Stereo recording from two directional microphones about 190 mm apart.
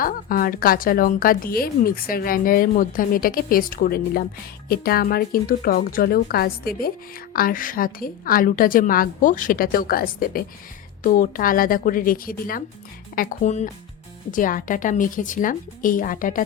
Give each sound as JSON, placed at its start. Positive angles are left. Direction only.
{"t": 0.0, "sound": "a woman's voice", "side_deg": 50}